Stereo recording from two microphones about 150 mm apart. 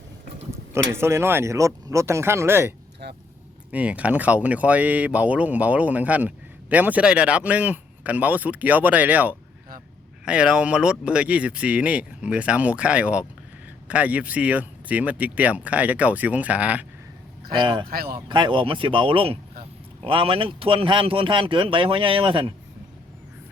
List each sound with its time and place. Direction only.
0.5 s speech: 15° right (ahead or behind)
3.0 s speech: 90° right
3.7 s speech: 10° right (ahead or behind)
17.5 s a man's voice: 30° right (ahead or behind)
17.8 s speech: 90° right
18.3 s a man's voice: 30° right (ahead or behind)